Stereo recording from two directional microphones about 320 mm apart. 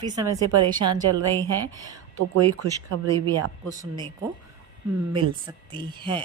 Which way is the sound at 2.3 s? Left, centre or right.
Right.